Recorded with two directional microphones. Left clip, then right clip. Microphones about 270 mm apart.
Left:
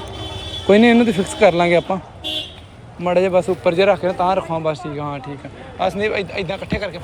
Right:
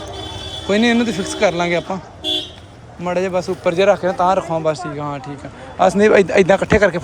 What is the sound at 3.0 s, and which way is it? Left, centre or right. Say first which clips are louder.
A man's voice: left 3 dB; centre.